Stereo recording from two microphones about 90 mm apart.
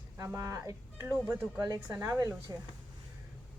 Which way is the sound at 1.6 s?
40° right (ahead or behind).